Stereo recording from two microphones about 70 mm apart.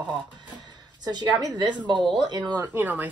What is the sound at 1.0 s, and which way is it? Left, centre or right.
Speech, right.